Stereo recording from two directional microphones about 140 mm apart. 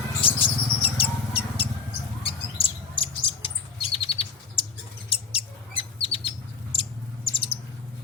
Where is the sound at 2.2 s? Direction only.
40° left (ahead or behind).